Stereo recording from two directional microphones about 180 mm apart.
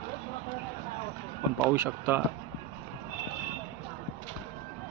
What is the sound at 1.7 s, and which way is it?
Speech, 10° right (ahead or behind).